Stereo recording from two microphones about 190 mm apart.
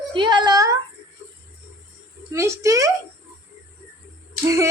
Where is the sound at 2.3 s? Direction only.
15° right (ahead or behind).